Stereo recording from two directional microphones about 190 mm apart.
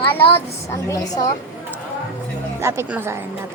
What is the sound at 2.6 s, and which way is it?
Speech, 15° right (ahead or behind).